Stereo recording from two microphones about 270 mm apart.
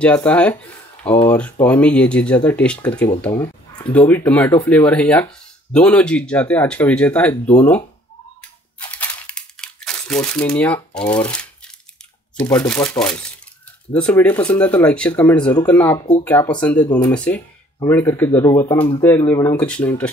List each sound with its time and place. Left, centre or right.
0.0 s speech: centre
8.7 s crumpling: centre
12.4 s speech: centre